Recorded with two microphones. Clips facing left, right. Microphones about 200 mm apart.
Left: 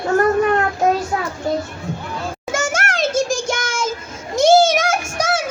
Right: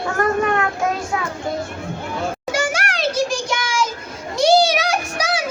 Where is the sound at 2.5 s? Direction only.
45° left (ahead or behind).